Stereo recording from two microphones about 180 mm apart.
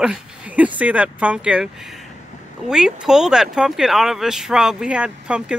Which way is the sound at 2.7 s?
5° right (ahead or behind).